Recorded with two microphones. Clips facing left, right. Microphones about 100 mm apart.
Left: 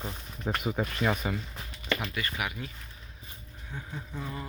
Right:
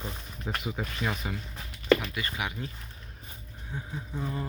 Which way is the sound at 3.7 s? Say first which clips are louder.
Right 2 dB; 15° right (ahead or behind).